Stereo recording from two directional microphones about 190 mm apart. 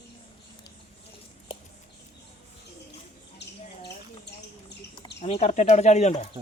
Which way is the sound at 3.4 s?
60° left (ahead or behind).